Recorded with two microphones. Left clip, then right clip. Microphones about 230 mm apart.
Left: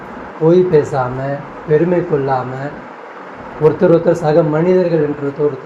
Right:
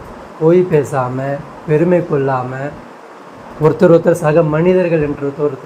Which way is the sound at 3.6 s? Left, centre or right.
Right.